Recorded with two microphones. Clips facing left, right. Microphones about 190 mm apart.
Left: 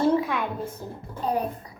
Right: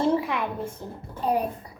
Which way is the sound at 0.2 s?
5° right (ahead or behind).